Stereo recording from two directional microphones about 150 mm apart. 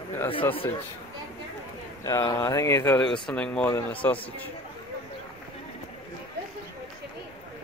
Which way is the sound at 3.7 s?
10° left (ahead or behind).